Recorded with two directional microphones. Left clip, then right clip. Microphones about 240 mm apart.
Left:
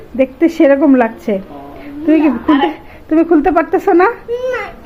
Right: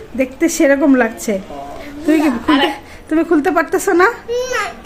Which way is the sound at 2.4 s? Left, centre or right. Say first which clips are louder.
Left 1 dB; right.